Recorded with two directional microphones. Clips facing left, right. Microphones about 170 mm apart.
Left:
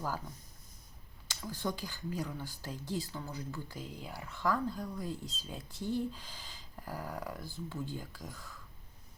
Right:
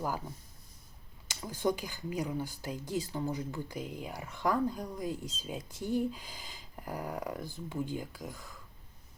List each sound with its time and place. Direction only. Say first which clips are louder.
1.4 s speech: right 6 dB; 15° right (ahead or behind)